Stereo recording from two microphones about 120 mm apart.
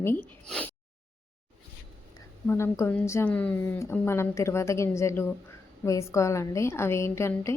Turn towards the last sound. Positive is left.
turn(degrees=25)  # may be behind; listen again after turning